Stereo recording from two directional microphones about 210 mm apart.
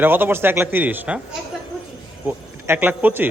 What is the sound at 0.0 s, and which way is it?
Speech, 10° right (ahead or behind).